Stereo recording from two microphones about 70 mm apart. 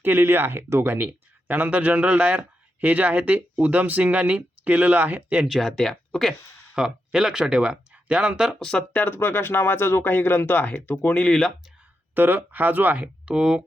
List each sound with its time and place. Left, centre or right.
0.0 s speech: right
5.5 s speech: centre
6.7 s speech: centre
8.5 s speech: centre
9.0 s speech: left; by 11.5 s centre
12.1 s speech: right; by 13.6 s centre